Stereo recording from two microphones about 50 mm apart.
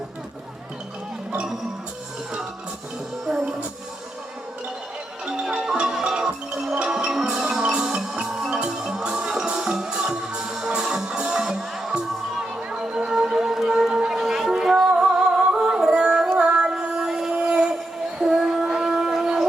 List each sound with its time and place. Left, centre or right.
5.3 s music: centre
6.9 s music: centre
7.6 s music: centre
17.3 s a sound: right